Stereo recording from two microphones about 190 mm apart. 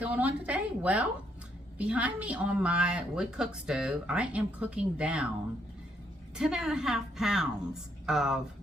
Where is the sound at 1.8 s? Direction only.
5° right (ahead or behind).